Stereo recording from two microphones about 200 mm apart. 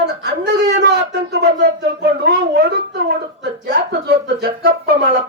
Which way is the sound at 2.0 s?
55° right (ahead or behind).